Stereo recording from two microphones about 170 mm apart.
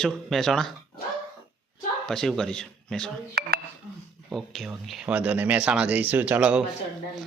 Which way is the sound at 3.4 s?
75° right (ahead or behind).